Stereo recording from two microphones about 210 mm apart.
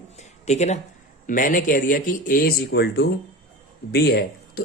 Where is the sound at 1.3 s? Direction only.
40° left (ahead or behind).